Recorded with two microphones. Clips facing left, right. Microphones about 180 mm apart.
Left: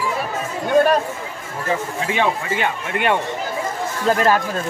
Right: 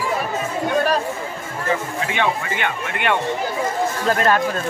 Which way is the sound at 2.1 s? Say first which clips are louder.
Left 2 dB; 35° left (ahead or behind).